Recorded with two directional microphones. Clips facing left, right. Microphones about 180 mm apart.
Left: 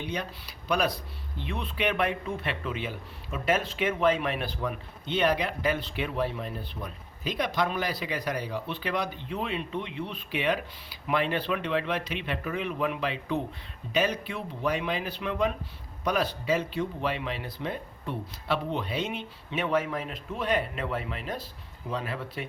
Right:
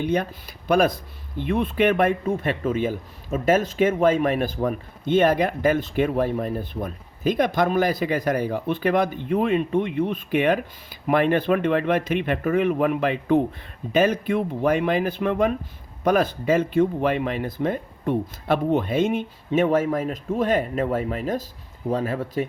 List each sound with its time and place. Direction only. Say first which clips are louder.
0.0 s speech: right 10 dB; 50° right (ahead or behind)